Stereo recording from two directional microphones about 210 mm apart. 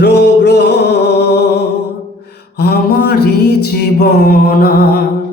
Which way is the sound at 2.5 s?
50° left (ahead or behind).